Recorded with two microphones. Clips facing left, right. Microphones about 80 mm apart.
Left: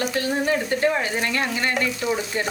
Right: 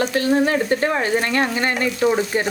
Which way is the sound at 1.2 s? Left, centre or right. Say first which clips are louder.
Right 4 dB; right.